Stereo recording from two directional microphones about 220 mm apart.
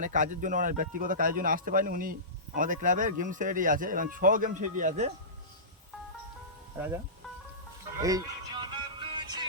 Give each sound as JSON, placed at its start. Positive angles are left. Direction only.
{"t": 0.0, "sound": "speech", "side_deg": -35}
{"t": 6.7, "sound": "speech", "side_deg": -10}
{"t": 8.0, "sound": "music", "side_deg": -20}